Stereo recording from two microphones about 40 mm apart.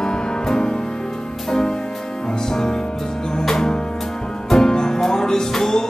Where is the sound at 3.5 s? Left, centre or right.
Centre.